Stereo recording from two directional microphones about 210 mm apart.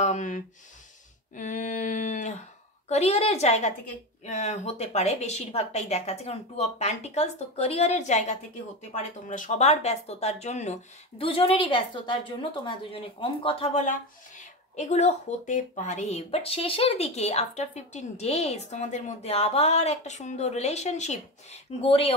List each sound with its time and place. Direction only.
0.0 s speech: 35° left (ahead or behind)